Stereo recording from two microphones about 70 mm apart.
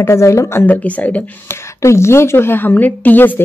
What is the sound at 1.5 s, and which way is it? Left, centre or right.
Speech, left.